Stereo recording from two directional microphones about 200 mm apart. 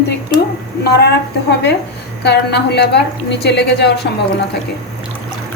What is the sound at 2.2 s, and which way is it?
A woman's voice, 55° left (ahead or behind).